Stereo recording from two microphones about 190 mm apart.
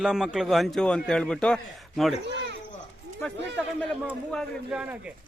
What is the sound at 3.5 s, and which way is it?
A man's voice, 5° left (ahead or behind).